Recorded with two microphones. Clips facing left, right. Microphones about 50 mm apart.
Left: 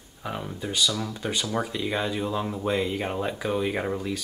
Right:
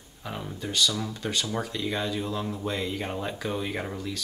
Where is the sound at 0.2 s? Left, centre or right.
Centre.